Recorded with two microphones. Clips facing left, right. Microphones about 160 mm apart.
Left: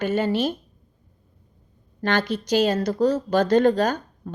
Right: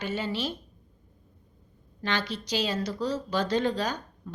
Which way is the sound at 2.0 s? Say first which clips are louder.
Left 8 dB; 50° left (ahead or behind).